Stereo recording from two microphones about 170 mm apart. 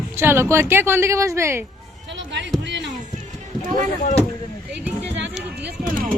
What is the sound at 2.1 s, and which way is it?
Basketball bounce, 90° right.